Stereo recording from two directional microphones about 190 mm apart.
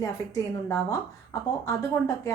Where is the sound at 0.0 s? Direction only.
20° left (ahead or behind).